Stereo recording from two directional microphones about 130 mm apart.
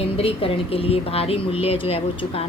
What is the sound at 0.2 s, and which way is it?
Speech, 45° left (ahead or behind).